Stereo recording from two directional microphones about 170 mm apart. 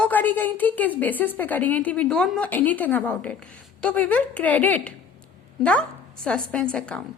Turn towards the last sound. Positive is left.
turn(degrees=5)  # may be behind; listen again after turning